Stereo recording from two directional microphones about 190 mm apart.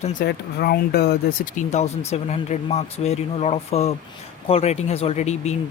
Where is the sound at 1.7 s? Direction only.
35° left (ahead or behind).